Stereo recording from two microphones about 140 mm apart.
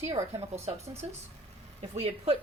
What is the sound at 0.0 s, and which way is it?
A woman's voice, 50° right (ahead or behind).